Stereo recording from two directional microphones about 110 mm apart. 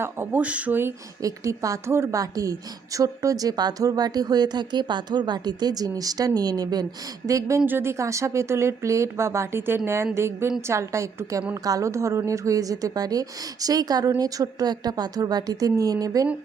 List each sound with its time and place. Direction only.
0.0 s speech: 20° right (ahead or behind); by 16.2 s 35° right (ahead or behind)